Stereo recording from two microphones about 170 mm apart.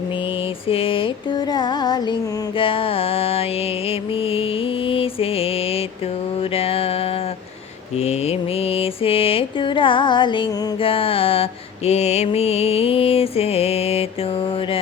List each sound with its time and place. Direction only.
0.7 s mantra: 35° left (ahead or behind)
1.5 s music: 25° left (ahead or behind)
2.6 s mantra: 30° left (ahead or behind)
4.9 s mantra: 35° left (ahead or behind)
6.6 s music: 35° left (ahead or behind)
7.9 s mantra: 35° left (ahead or behind)